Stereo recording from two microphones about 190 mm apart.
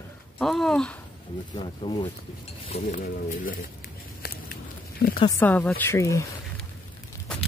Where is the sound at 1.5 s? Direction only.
30° left (ahead or behind).